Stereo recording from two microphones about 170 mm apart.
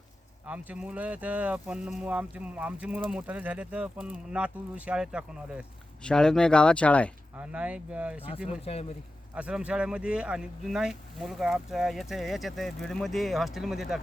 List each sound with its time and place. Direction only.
0.4 s speech: 10° right (ahead or behind)
6.0 s speech: 5° left (ahead or behind)
7.3 s speech: 10° right (ahead or behind)
8.6 s speech: 35° left (ahead or behind)
9.3 s speech: 5° right (ahead or behind)